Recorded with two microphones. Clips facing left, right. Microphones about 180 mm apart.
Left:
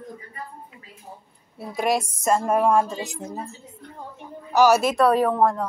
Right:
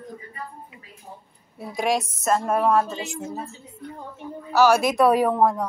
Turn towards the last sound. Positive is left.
turn(degrees=-5)  # may be behind; listen again after turning